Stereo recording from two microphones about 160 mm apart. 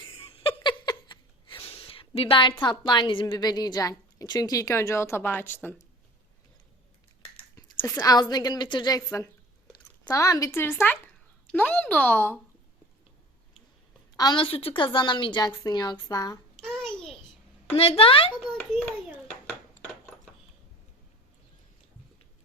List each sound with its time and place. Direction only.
0.0 s a sound: 35° left (ahead or behind)
2.5 s a woman's voice: 30° left (ahead or behind)
7.5 s a woman's voice: 15° left (ahead or behind)
14.2 s a woman's voice: 30° left (ahead or behind)
16.6 s a sound: 5° right (ahead or behind)
17.7 s speech: 35° left (ahead or behind)